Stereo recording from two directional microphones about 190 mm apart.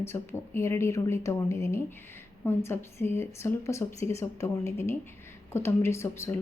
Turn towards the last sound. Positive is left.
turn(degrees=15)  # may be behind; listen again after turning